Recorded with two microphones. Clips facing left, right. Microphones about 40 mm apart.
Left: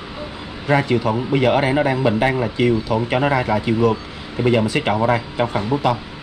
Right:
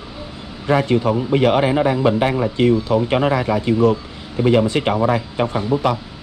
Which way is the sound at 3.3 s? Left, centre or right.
Left.